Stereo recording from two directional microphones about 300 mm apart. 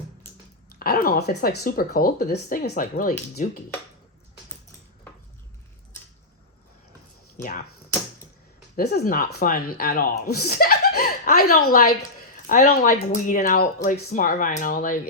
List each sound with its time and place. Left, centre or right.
0.8 s speech: left
8.7 s speech: left